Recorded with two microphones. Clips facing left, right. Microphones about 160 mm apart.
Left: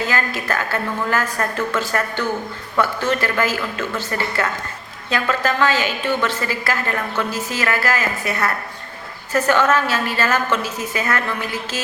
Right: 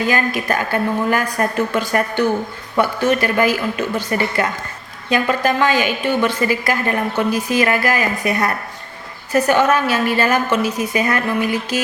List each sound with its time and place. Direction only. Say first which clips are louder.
0.0 s a woman's voice: right 4 dB; 15° right (ahead or behind)